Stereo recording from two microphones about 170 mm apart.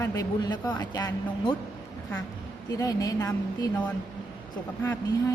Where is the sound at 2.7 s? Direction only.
20° left (ahead or behind).